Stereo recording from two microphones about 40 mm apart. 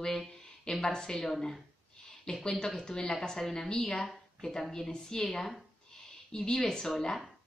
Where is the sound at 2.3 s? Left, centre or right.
Centre.